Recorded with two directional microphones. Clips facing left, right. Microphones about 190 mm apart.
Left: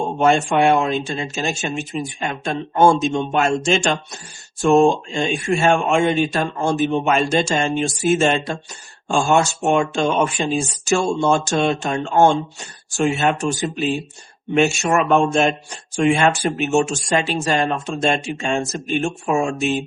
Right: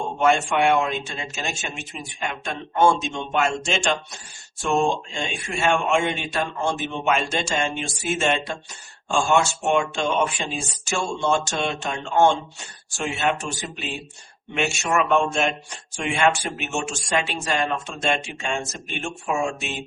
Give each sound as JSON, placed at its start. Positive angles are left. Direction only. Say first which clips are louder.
{"t": 0.2, "sound": "speech", "louder": "left 4 dB", "side_deg": 35}